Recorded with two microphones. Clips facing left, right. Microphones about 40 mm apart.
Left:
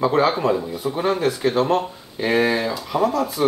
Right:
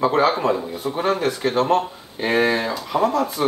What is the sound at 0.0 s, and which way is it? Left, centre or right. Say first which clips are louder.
Speech: even; centre.